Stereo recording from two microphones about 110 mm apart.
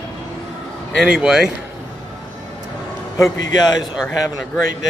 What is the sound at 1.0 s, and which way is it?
Speech, 5° right (ahead or behind).